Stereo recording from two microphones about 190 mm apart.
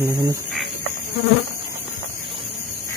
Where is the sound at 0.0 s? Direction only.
15° right (ahead or behind).